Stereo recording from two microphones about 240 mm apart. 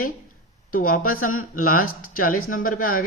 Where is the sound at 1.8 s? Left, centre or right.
Left.